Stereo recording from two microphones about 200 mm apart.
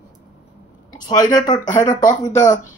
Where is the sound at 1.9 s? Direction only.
40° left (ahead or behind).